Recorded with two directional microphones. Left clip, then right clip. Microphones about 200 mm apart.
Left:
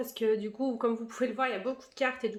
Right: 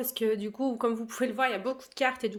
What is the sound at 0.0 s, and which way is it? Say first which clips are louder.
A man's voice: even; 55° right (ahead or behind).